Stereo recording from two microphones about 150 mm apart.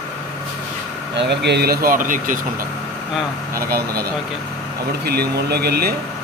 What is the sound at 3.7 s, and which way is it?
Speech, 90° right.